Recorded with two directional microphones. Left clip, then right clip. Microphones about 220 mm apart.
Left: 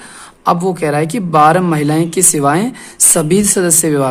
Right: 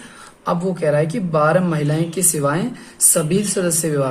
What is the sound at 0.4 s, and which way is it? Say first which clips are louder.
A man's voice: left 6 dB; 40° left (ahead or behind).